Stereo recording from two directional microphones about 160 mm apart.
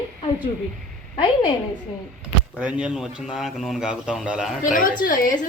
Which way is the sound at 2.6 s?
5° right (ahead or behind).